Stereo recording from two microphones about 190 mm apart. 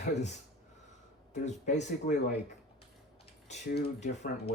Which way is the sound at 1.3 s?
35° left (ahead or behind).